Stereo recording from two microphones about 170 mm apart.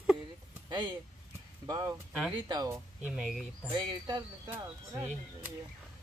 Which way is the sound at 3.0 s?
Centre (ahead or behind).